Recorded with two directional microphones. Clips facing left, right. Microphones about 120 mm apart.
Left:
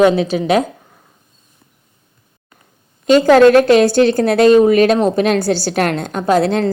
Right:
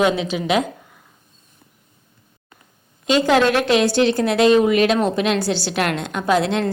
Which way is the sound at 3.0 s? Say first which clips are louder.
Left 8 dB; 45° left (ahead or behind).